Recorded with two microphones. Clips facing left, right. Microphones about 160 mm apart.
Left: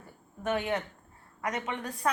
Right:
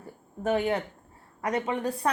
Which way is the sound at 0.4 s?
35° right (ahead or behind).